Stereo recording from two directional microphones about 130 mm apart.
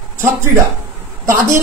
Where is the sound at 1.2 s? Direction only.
20° right (ahead or behind).